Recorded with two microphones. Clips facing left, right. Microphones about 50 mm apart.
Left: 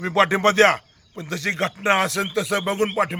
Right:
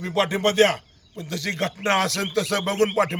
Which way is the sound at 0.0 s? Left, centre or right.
Left.